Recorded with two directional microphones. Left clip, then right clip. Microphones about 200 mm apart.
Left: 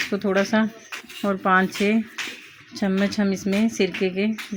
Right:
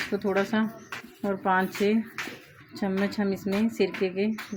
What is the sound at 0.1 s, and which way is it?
Speech, 45° left (ahead or behind).